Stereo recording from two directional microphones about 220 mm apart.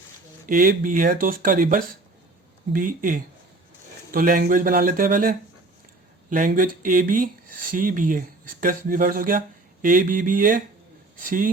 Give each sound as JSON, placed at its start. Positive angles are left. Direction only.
{"t": 0.4, "sound": "speech", "side_deg": -40}